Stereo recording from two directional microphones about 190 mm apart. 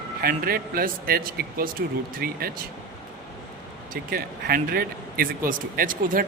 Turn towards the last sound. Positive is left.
turn(degrees=-50)  # may be behind; listen again after turning